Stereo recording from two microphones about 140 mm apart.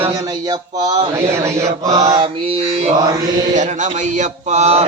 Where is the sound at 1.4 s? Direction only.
20° right (ahead or behind).